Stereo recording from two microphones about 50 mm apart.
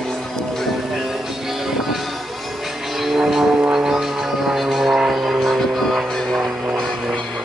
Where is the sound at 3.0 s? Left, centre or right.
Centre.